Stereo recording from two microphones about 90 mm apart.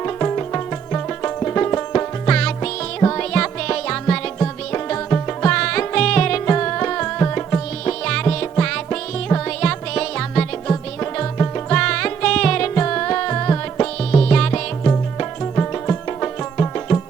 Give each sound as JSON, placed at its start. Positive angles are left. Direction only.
{"t": 0.0, "sound": "music", "side_deg": 20}
{"t": 5.5, "sound": "music", "side_deg": 10}
{"t": 7.9, "sound": "music", "side_deg": 10}
{"t": 11.0, "sound": "music", "side_deg": 20}
{"t": 14.1, "sound": "music", "side_deg": 10}
{"t": 15.2, "sound": "music", "side_deg": 20}